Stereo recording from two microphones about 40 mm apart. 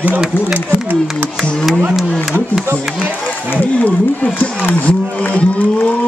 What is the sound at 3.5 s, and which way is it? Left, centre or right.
Speech, left.